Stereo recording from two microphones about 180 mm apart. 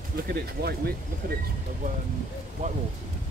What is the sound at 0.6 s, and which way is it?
Speech, 60° right (ahead or behind).